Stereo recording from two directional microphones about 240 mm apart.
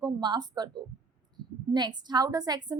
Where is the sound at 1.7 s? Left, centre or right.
Centre.